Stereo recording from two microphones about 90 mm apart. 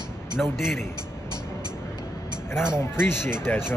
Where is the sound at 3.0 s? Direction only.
25° left (ahead or behind).